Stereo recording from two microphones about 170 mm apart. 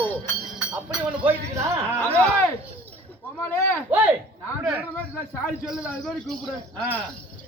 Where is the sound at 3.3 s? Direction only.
15° left (ahead or behind).